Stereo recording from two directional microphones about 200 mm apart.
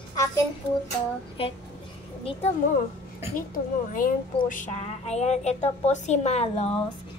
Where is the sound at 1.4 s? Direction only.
30° left (ahead or behind).